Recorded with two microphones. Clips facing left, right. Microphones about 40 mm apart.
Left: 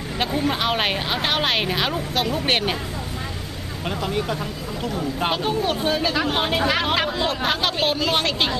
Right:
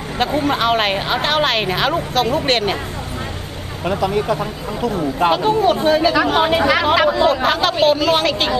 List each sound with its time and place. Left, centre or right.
0.3 s a woman's voice: centre
2.3 s speech: centre
3.9 s speech: right
5.3 s a woman's voice: centre